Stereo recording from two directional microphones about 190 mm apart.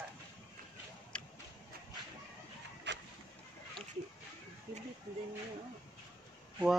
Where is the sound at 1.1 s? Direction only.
5° left (ahead or behind).